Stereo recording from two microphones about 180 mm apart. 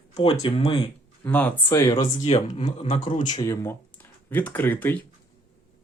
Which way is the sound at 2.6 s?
40° left (ahead or behind).